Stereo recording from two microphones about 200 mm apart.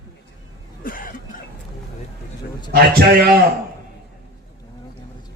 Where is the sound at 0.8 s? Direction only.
45° left (ahead or behind).